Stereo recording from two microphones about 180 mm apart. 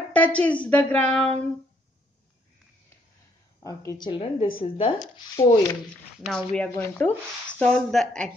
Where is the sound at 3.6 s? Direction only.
20° left (ahead or behind).